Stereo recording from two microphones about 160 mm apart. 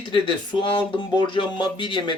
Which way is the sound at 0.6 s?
30° left (ahead or behind).